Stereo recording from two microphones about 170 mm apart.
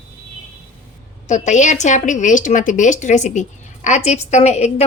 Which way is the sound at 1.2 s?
45° left (ahead or behind).